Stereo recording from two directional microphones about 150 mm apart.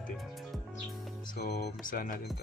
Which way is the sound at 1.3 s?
90° left.